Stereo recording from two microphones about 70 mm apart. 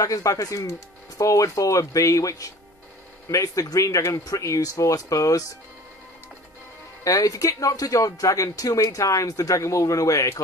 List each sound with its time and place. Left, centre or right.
0.0 s speech: left
7.1 s speech: left